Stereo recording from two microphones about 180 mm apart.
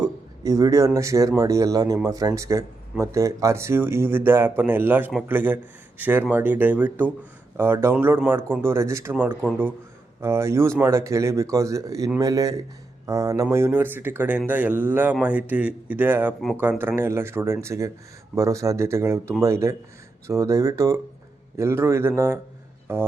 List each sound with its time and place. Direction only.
0.0 s speech: 20° right (ahead or behind)